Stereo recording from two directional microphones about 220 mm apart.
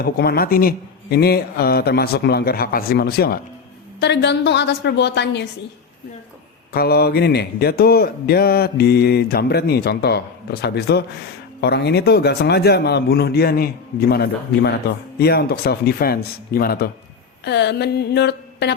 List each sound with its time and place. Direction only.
0.0 s speech: 45° left (ahead or behind)
6.7 s speech: 45° left (ahead or behind)